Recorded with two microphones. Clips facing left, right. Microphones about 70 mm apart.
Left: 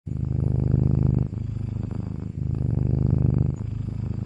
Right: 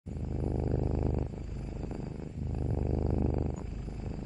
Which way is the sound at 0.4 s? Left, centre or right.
Centre.